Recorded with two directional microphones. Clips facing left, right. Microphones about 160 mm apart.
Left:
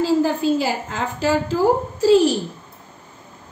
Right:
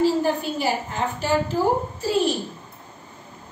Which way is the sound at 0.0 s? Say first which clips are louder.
Left 3 dB; 90° left.